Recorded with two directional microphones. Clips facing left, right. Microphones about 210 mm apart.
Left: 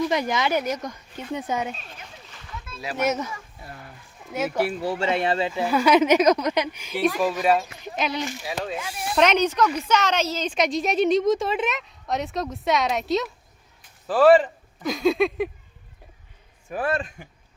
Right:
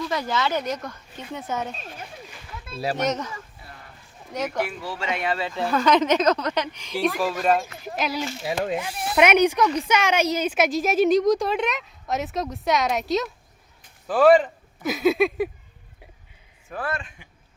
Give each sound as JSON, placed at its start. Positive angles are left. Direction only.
{"t": 0.0, "sound": "speech", "side_deg": 20}
{"t": 2.6, "sound": "speech", "side_deg": -35}
{"t": 3.0, "sound": "speech", "side_deg": 10}
{"t": 4.8, "sound": "speech", "side_deg": 40}
{"t": 5.5, "sound": "a woman's voice", "side_deg": 10}
{"t": 16.6, "sound": "speech", "side_deg": 20}
{"t": 16.9, "sound": "speech", "side_deg": 40}